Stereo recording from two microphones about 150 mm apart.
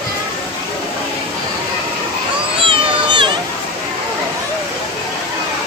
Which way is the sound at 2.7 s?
30° right (ahead or behind).